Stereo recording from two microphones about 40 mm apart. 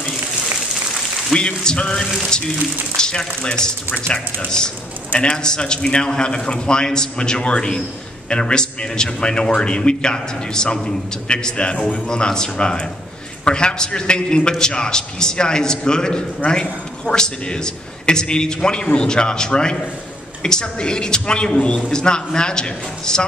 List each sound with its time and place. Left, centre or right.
1.3 s a man's voice: left